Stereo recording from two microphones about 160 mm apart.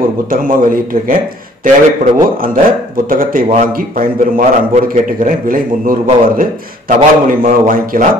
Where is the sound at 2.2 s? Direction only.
60° right (ahead or behind).